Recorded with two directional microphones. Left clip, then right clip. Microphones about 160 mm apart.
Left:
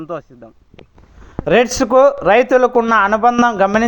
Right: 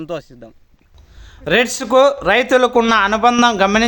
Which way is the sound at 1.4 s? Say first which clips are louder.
Left 3 dB; 5° left (ahead or behind).